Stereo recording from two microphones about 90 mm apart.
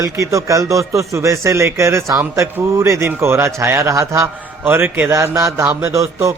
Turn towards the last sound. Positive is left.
turn(degrees=-35)  # may be behind; listen again after turning